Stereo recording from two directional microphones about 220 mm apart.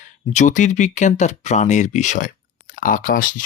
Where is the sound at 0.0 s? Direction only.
35° left (ahead or behind).